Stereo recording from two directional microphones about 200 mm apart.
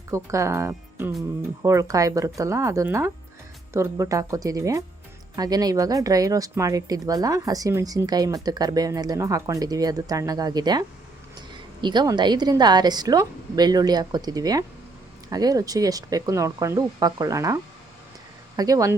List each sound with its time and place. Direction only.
0.1 s a woman's voice: 15° right (ahead or behind)